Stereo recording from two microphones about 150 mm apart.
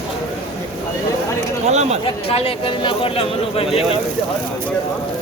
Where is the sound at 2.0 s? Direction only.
40° left (ahead or behind).